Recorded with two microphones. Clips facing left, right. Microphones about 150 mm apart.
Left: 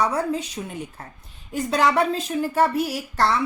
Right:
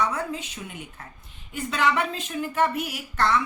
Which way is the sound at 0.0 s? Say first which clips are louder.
Left 5 dB; 35° left (ahead or behind).